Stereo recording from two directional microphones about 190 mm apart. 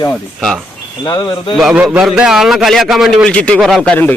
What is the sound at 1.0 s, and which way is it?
Speech, 25° left (ahead or behind).